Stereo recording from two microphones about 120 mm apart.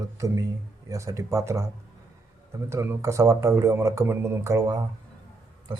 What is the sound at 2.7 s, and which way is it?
Speech, 25° right (ahead or behind).